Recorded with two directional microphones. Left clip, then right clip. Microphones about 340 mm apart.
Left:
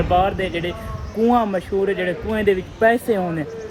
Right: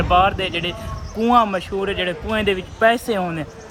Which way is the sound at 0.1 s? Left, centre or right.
Centre.